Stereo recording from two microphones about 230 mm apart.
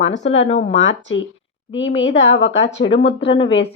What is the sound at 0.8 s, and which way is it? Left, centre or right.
Speech, left.